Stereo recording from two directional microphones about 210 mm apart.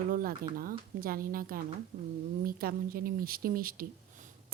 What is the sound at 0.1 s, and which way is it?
Speech, 45° right (ahead or behind).